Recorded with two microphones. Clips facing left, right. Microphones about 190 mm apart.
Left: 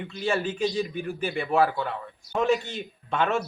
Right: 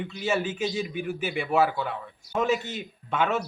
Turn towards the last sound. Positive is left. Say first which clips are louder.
# left 1 dB
turn(degrees=-5)  # may be behind; listen again after turning